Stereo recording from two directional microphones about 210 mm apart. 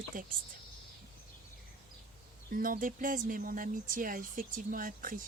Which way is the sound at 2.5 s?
40° right (ahead or behind).